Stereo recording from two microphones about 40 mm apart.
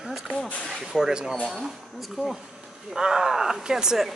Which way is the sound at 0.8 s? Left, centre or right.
Centre.